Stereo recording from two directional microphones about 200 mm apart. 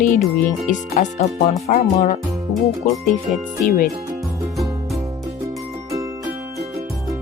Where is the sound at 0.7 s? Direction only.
35° left (ahead or behind).